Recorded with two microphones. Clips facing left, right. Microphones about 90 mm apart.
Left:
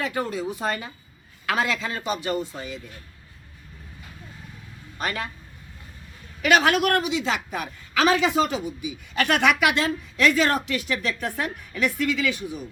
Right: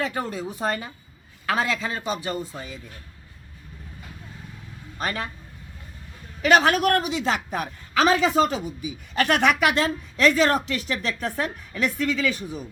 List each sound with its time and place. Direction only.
0.0 s a woman's voice: 30° right (ahead or behind)
4.9 s a woman's voice: 30° right (ahead or behind)
6.4 s a woman's voice: 35° right (ahead or behind)